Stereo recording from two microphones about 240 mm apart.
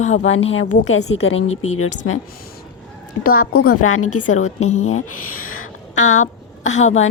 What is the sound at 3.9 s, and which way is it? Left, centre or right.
A woman's voice, left.